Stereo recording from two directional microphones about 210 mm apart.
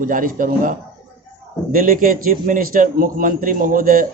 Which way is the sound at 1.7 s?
40° right (ahead or behind).